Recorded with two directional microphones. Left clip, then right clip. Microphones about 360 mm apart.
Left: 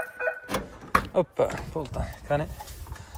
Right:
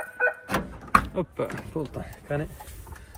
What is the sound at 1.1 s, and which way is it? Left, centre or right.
Speech, centre.